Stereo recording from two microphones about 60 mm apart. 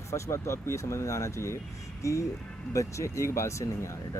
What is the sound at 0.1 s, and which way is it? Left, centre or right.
Speech, left.